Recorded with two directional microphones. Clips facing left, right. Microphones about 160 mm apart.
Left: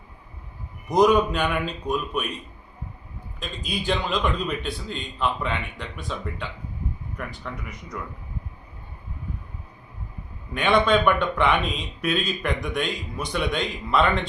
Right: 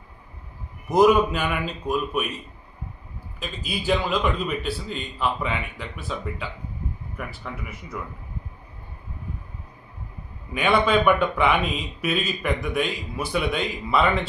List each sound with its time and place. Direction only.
0.9 s a man's voice: 5° right (ahead or behind)
3.4 s a man's voice: 5° right (ahead or behind)
10.5 s a man's voice: 5° right (ahead or behind)